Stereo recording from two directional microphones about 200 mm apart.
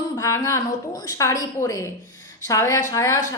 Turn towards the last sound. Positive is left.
turn(degrees=15)  # may be behind; listen again after turning